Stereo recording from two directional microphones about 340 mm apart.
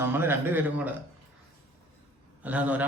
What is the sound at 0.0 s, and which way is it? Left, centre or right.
Speech, centre.